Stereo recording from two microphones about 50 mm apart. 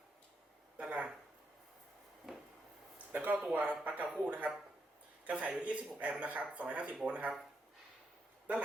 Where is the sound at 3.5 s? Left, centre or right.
Right.